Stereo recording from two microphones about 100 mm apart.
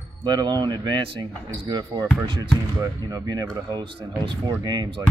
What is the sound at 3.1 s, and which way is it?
Speech, 40° right (ahead or behind).